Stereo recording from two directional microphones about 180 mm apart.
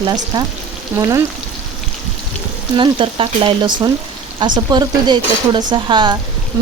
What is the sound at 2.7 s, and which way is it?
Frying, 25° right (ahead or behind).